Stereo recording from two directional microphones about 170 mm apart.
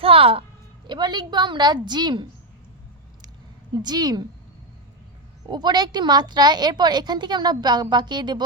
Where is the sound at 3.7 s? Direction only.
25° right (ahead or behind).